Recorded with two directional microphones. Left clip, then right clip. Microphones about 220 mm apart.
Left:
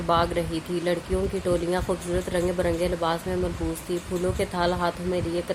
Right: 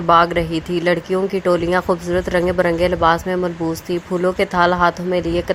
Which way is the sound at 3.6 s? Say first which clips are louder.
Right 9 dB; 35° right (ahead or behind).